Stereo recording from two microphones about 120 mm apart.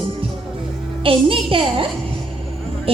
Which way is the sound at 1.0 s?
50° right (ahead or behind).